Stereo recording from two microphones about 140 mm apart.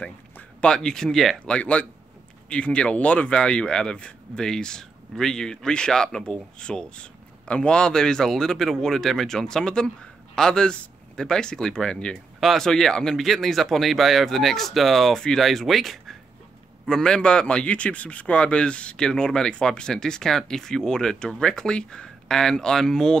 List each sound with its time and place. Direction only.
0.6 s speech: 5° left (ahead or behind)